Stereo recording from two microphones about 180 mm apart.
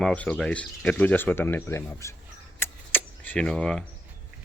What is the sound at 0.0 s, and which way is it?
Speech, 5° left (ahead or behind).